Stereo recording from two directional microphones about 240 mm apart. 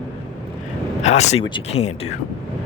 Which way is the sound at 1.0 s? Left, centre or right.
Left.